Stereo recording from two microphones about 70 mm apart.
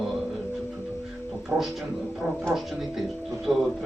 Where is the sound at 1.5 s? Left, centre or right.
Right.